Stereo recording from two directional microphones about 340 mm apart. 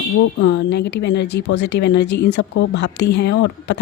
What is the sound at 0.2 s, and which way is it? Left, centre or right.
Speech, left.